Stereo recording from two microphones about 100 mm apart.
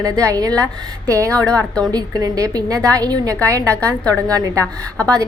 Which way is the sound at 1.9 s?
35° right (ahead or behind).